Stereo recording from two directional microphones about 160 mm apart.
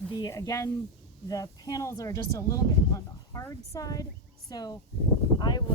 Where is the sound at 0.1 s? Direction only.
25° left (ahead or behind).